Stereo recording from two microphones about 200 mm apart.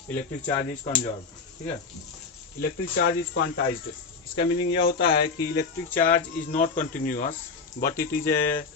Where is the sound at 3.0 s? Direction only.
55° left (ahead or behind).